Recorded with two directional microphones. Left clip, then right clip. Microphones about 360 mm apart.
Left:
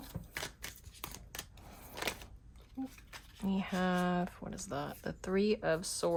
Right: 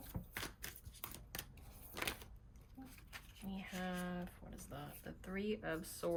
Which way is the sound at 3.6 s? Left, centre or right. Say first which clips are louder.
Left 11 dB; centre.